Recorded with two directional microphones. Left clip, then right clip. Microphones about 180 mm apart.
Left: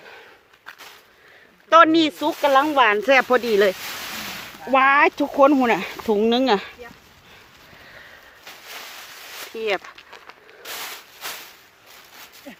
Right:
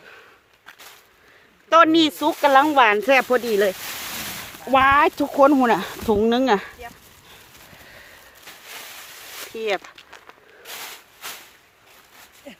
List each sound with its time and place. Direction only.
1.7 s speech: 5° right (ahead or behind)
4.7 s speech: 15° right (ahead or behind)
9.6 s speech: 5° right (ahead or behind)
12.5 s a sound: 50° right (ahead or behind)